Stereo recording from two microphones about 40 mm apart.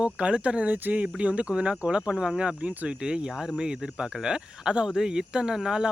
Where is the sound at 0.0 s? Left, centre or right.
Right.